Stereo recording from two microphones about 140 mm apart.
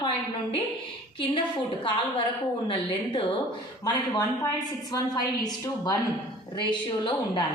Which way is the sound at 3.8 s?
25° left (ahead or behind).